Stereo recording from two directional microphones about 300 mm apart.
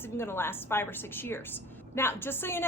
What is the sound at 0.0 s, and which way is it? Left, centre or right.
A woman's voice, centre.